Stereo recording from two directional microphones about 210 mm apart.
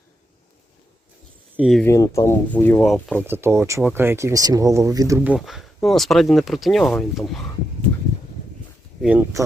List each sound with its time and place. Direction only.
1.5 s speech: centre (ahead or behind)
1.8 s speech: 15° left (ahead or behind)
3.2 s speech: 10° right (ahead or behind)
9.0 s speech: 5° right (ahead or behind)